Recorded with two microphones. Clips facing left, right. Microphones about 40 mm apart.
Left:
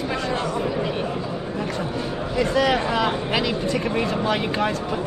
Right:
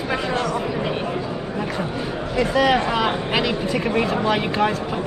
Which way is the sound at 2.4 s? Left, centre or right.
Centre.